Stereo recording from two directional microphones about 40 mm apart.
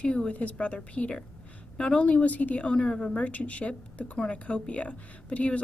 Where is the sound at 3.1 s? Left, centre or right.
Left.